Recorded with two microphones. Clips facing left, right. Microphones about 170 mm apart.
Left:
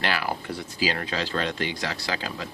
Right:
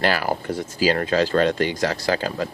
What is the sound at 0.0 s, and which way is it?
A man's voice, 40° right (ahead or behind).